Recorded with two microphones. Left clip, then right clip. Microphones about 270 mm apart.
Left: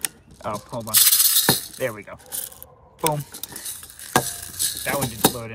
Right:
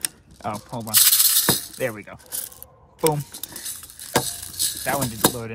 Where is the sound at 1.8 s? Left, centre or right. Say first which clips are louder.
Even; right.